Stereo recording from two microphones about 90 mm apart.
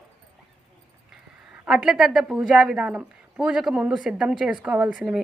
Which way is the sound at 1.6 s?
10° right (ahead or behind).